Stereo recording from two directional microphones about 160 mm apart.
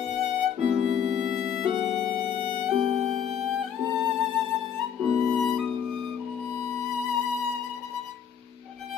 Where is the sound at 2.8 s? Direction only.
45° right (ahead or behind).